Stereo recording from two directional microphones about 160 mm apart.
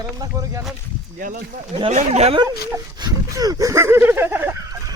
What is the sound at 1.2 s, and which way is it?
Speech, 60° right (ahead or behind).